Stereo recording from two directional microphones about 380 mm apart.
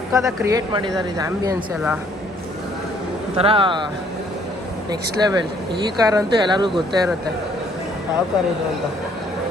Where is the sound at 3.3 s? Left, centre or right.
Centre.